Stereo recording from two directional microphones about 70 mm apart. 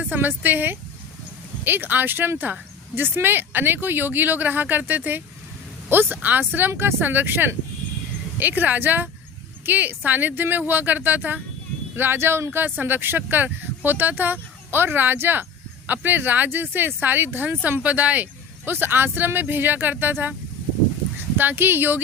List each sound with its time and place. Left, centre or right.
0.1 s speech: right
21.3 s speech: right